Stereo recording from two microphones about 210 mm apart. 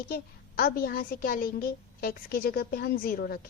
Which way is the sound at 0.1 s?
45° left (ahead or behind).